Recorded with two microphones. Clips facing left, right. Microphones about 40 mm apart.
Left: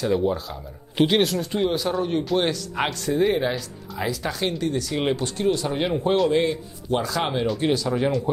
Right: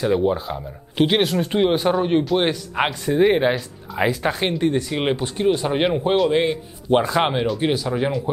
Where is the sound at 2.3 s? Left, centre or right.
Right.